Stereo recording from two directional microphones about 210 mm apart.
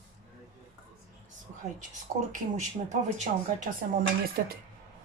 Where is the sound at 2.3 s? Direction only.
35° right (ahead or behind).